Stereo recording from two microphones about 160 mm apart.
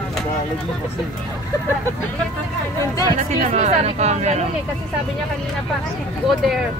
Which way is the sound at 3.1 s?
50° right (ahead or behind).